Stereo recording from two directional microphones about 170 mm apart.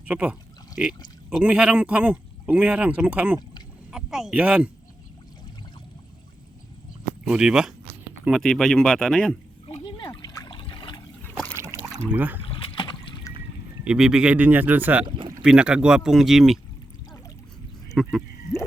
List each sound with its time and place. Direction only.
0.1 s speech: 5° right (ahead or behind)
7.3 s speech: 5° right (ahead or behind)
9.6 s water: 30° left (ahead or behind)
11.2 s trickle: 10° left (ahead or behind)
11.5 s boat: 15° right (ahead or behind)
12.0 s speech: 10° right (ahead or behind)
12.5 s boat: 30° left (ahead or behind)
13.8 s speech: 5° right (ahead or behind)
15.0 s speech: 30° right (ahead or behind)
15.4 s speech: 5° right (ahead or behind)
18.0 s speech: centre (ahead or behind)